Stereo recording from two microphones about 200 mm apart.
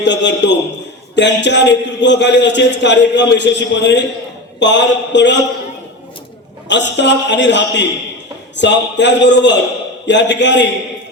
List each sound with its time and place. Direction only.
0.0 s a man's voice: 60° left (ahead or behind)
6.7 s a man's voice: 60° left (ahead or behind)